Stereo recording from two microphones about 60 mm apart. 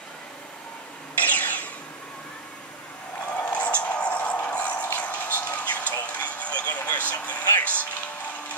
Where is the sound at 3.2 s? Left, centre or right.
Left.